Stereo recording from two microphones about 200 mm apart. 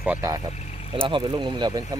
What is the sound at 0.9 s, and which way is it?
Speech, 25° right (ahead or behind).